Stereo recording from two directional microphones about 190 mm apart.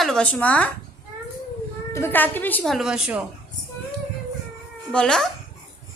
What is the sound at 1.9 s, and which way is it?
Speech, 10° left (ahead or behind).